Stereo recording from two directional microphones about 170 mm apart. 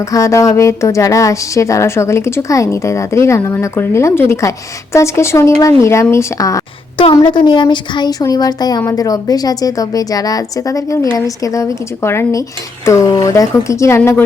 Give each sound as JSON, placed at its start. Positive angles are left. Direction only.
{"t": 0.1, "sound": "a woman's voice", "side_deg": 20}